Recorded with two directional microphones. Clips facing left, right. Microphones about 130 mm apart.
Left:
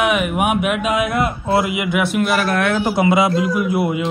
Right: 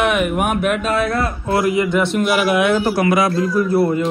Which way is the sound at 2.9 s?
25° left (ahead or behind).